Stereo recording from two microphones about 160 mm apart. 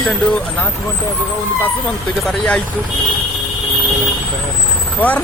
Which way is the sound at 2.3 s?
5° left (ahead or behind).